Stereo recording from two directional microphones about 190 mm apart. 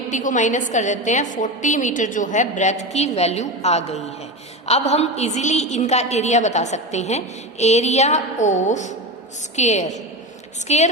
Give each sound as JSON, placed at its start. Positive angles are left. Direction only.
{"t": 0.1, "sound": "a woman's voice", "side_deg": 40}